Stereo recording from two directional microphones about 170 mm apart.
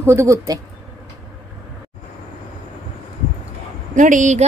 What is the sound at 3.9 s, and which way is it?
Speech, 50° right (ahead or behind).